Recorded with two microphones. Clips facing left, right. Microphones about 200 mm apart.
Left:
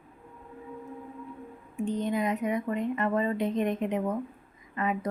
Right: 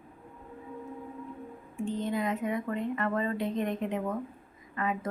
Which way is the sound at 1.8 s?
20° left (ahead or behind).